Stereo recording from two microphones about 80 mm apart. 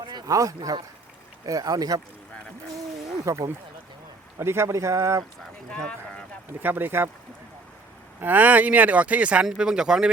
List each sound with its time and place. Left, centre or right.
0.0 s boat: right
0.3 s speech: right
3.2 s speech: right
5.7 s speech: centre
6.6 s speech: right
8.2 s speech: right